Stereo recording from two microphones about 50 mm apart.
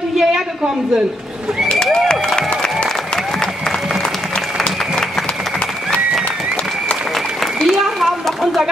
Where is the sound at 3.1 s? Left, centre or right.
Centre.